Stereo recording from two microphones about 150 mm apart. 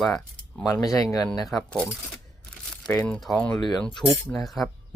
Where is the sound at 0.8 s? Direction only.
25° left (ahead or behind).